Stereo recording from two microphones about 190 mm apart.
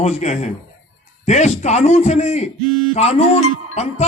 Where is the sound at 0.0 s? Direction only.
35° left (ahead or behind).